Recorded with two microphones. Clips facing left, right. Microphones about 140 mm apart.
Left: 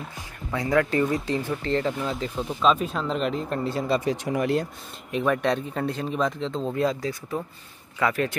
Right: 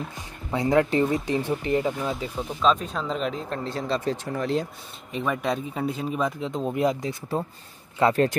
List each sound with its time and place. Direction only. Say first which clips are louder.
0.5 s speech: right 2 dB; 20° right (ahead or behind)
2.6 s speech: left 1 dB; 5° left (ahead or behind); by 7.2 s 20° right (ahead or behind)
8.0 s speech: right 4 dB; 35° right (ahead or behind)